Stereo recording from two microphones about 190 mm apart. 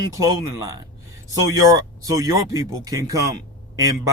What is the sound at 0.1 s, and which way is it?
Speech, 20° right (ahead or behind).